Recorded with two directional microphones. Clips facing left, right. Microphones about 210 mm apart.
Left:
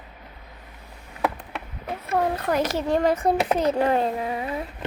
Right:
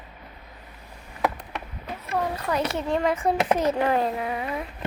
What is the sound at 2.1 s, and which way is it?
A child's voice, 50° left (ahead or behind).